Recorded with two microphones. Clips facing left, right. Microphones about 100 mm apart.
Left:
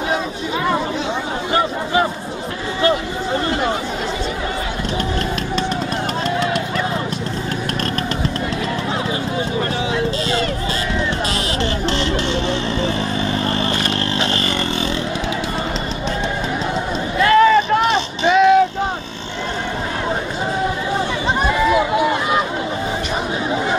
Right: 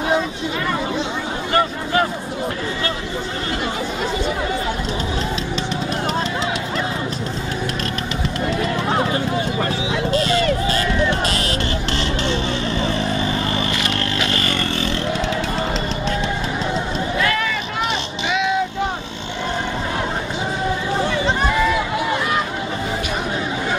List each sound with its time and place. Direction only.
13.6 s vehicle: 35° left (ahead or behind)
17.2 s vehicle: 35° left (ahead or behind)